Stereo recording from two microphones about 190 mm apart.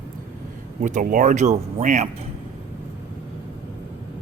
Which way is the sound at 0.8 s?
45° right (ahead or behind).